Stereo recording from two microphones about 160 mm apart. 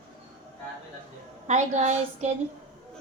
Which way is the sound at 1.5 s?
45° right (ahead or behind).